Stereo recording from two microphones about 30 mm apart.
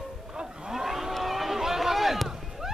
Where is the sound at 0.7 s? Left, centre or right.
Centre.